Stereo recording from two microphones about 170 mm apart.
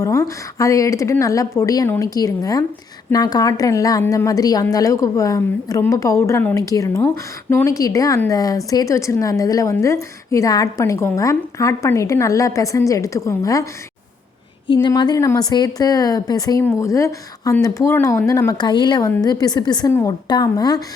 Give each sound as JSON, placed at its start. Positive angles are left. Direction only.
{"t": 0.0, "sound": "speech", "side_deg": 20}
{"t": 14.7, "sound": "speech", "side_deg": 25}